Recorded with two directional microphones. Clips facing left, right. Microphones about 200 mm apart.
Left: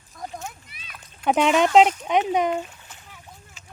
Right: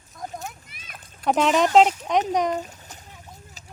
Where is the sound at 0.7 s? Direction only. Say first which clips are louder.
Right 1 dB; 50° right (ahead or behind).